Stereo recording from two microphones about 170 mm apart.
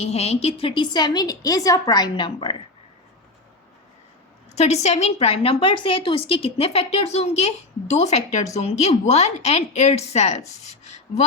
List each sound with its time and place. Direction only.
0.0 s a woman's voice: 40° left (ahead or behind)
4.5 s a woman's voice: 40° left (ahead or behind)